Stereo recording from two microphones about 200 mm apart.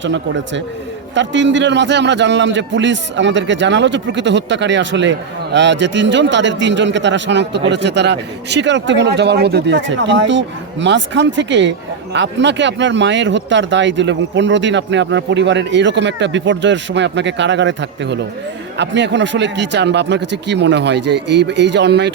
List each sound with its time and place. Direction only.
0.0 s a man's voice: 65° right (ahead or behind)